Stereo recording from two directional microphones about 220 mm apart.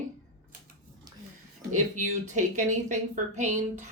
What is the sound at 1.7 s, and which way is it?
A woman's voice, 35° right (ahead or behind).